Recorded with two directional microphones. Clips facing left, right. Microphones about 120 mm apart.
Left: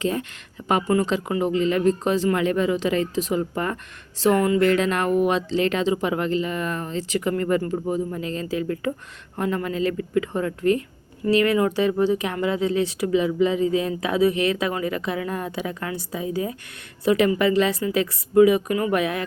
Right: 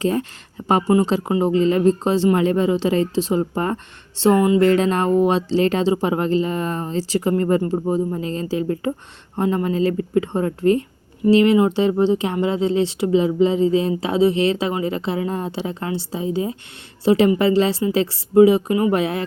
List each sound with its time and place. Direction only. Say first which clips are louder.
0.0 s speech: right 4 dB; 35° right (ahead or behind)
4.6 s speech: right 4 dB; 35° right (ahead or behind)